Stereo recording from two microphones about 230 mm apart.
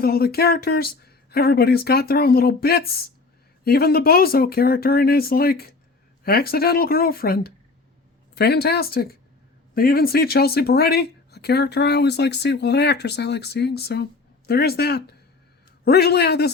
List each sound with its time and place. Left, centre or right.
0.0 s speech: left